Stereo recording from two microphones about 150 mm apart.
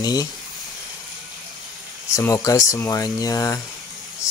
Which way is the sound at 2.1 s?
20° left (ahead or behind).